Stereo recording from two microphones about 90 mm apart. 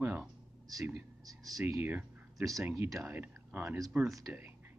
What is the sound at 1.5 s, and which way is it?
Speech, 40° right (ahead or behind).